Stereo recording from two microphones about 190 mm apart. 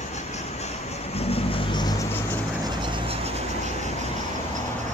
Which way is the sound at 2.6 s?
30° right (ahead or behind).